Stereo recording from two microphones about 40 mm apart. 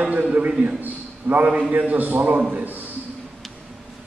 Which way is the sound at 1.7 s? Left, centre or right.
Right.